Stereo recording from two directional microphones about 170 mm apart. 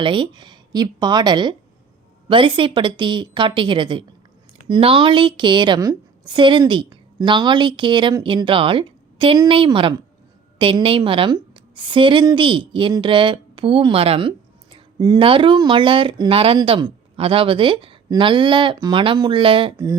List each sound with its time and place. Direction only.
0.0 s a woman's voice: 30° right (ahead or behind)